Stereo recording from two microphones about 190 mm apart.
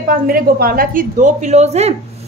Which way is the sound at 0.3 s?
50° right (ahead or behind).